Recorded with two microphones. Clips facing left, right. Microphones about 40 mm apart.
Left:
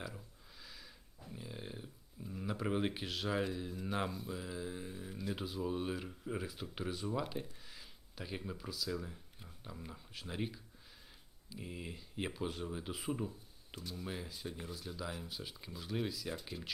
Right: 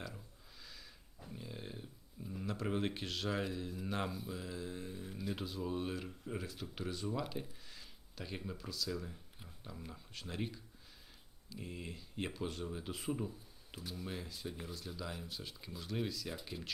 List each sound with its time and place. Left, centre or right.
0.6 s a sound: centre
7.7 s speech: centre
13.7 s speech: centre
14.0 s speech: centre